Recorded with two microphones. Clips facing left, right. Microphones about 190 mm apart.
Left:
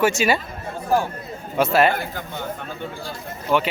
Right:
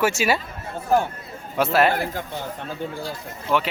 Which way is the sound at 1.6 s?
Centre (ahead or behind).